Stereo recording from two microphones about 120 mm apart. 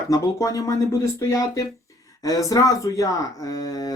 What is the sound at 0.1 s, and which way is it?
Speech, 30° left (ahead or behind).